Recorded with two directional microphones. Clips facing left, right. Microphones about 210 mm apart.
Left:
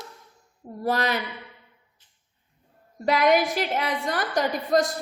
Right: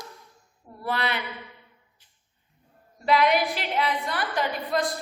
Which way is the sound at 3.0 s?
45° left (ahead or behind).